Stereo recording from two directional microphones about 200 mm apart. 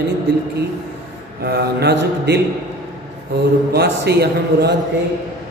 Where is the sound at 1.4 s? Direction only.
55° right (ahead or behind).